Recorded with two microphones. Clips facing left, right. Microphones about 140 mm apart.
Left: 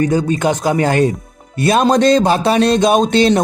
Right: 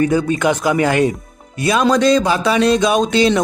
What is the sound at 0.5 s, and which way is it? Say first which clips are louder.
Speech: left 1 dB; 25° left (ahead or behind).